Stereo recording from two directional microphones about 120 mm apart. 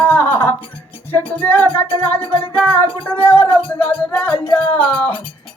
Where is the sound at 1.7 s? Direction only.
45° left (ahead or behind).